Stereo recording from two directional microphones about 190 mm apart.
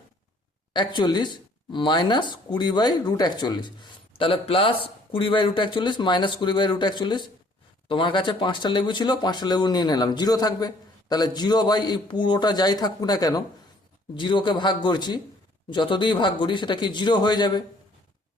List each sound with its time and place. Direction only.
0.7 s speech: 25° left (ahead or behind)